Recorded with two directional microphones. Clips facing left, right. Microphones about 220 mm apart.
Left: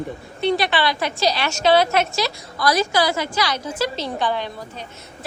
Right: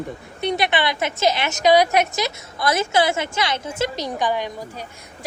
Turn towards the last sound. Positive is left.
turn(degrees=-10)  # may be behind; listen again after turning